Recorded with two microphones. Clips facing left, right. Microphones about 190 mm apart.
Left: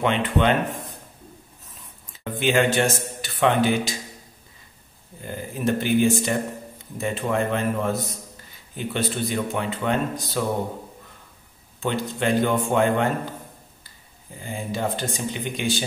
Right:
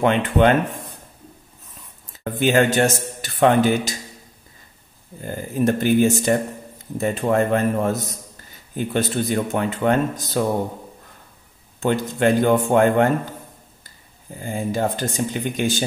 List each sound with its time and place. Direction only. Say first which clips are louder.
0.0 s speech: right 5 dB; 45° right (ahead or behind)
2.4 s speech: right 3 dB; 45° right (ahead or behind)
5.2 s speech: right 5 dB; 45° right (ahead or behind)
11.8 s speech: right 6 dB; 45° right (ahead or behind)
14.4 s speech: right 5 dB; 45° right (ahead or behind)